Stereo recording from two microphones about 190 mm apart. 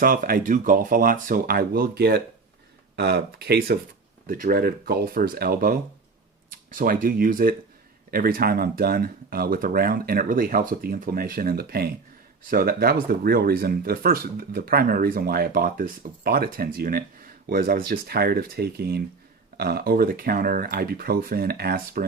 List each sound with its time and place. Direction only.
0.0 s speech: 45° right (ahead or behind)